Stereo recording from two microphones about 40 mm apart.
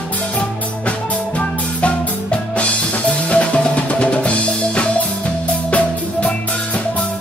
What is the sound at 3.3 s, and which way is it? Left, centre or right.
Drum, left.